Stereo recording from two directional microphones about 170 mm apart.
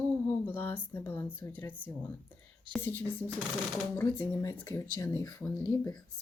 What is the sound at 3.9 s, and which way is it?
Speech, 15° left (ahead or behind).